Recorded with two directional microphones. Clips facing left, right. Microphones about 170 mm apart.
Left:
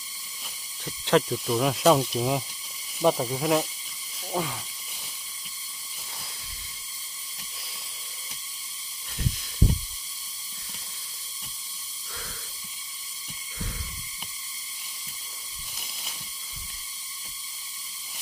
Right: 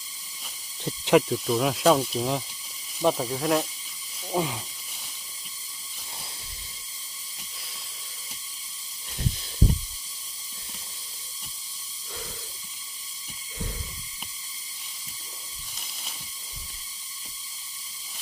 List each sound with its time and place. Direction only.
0.9 s a sound: 15° right (ahead or behind)
1.3 s speech: centre (ahead or behind)
4.4 s speech: 15° right (ahead or behind)